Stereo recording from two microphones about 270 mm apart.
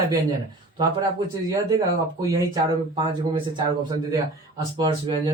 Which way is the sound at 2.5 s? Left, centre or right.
Centre.